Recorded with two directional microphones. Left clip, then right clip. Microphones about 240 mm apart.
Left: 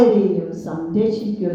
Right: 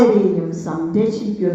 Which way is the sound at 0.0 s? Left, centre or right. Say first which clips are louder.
Right 1 dB; right.